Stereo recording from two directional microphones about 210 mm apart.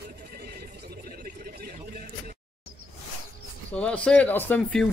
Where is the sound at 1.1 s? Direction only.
45° right (ahead or behind).